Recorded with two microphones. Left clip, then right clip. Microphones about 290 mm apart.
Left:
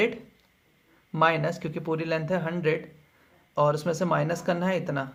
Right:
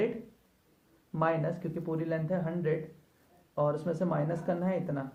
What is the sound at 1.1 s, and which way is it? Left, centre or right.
Speech, left.